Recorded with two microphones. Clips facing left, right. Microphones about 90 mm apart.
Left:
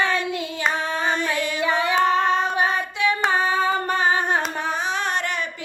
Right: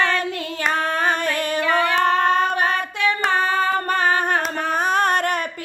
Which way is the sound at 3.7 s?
50° right (ahead or behind).